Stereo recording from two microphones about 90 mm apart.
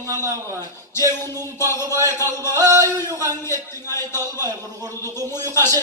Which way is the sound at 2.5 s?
40° right (ahead or behind).